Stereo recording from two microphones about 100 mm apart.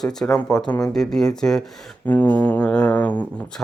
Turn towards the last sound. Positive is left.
turn(degrees=15)  # may be behind; listen again after turning